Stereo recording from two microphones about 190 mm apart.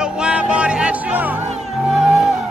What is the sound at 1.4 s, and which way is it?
Music, 35° right (ahead or behind).